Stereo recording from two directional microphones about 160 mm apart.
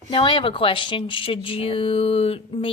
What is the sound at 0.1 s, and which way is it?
A woman's voice, 30° left (ahead or behind).